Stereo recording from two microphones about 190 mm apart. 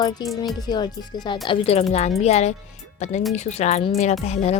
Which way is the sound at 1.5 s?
35° left (ahead or behind).